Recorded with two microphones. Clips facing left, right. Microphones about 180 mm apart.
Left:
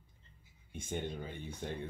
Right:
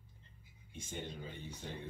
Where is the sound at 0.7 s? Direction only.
55° left (ahead or behind).